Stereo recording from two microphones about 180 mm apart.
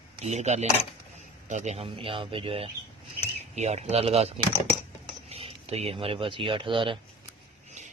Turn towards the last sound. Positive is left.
turn(degrees=-30)  # may be behind; listen again after turning